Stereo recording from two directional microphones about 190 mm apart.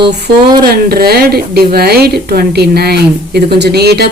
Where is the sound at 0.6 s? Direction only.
55° right (ahead or behind).